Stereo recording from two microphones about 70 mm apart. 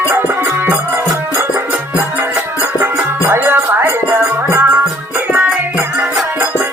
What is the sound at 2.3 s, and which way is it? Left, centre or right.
Music, right.